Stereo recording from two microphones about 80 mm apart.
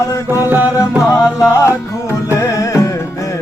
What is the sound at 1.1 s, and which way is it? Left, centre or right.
Music, left.